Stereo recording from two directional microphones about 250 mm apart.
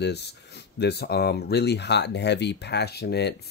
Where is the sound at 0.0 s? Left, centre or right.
Left.